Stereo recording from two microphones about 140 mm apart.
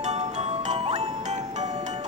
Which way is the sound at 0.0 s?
55° right (ahead or behind).